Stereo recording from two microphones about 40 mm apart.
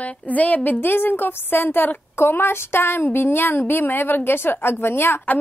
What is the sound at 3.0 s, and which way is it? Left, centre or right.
A woman's voice, left.